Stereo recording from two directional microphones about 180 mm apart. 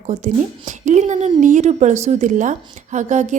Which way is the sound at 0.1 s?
40° right (ahead or behind).